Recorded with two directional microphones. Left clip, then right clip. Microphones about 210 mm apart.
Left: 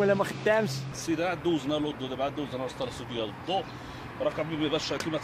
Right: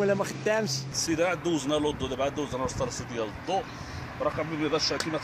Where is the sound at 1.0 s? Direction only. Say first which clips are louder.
Right 1 dB; 25° right (ahead or behind).